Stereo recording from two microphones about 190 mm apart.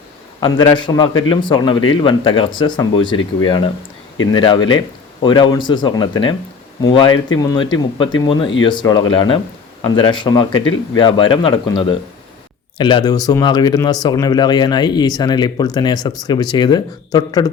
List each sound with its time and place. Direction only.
0.3 s speech: 20° left (ahead or behind)